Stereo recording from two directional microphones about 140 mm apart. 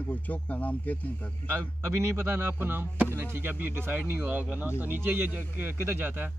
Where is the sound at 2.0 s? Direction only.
15° right (ahead or behind).